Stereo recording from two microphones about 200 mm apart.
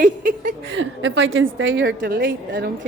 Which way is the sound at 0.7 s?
70° right (ahead or behind).